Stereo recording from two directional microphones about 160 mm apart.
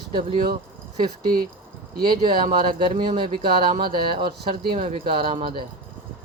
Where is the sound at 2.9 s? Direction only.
30° right (ahead or behind).